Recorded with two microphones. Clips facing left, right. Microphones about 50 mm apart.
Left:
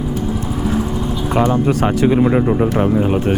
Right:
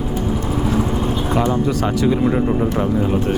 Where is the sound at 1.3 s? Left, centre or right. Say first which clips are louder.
Left 4 dB; left.